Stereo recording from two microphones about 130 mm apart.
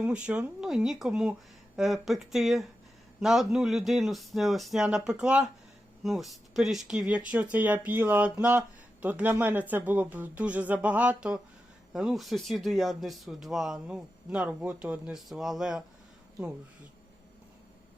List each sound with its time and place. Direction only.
0.0 s speech: 10° right (ahead or behind)